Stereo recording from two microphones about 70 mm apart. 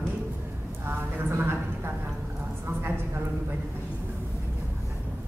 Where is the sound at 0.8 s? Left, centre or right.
Right.